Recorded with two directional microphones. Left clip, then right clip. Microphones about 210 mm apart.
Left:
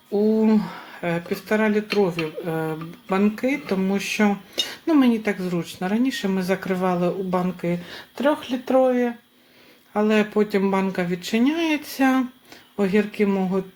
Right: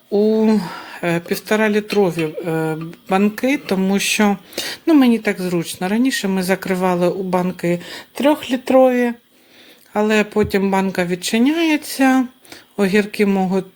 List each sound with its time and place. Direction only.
0.1 s speech: 50° right (ahead or behind)
9.9 s speech: 35° right (ahead or behind)